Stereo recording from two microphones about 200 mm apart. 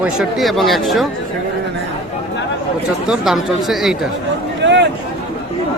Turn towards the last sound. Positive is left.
turn(degrees=-60)  # may be behind; listen again after turning